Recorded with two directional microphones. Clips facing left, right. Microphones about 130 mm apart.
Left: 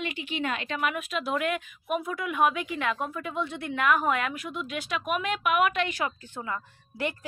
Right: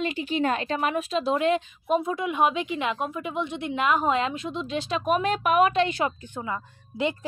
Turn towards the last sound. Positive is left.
turn(degrees=-20)  # may be behind; listen again after turning